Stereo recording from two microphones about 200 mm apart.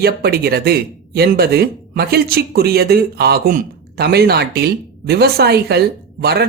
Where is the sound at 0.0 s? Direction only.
50° right (ahead or behind).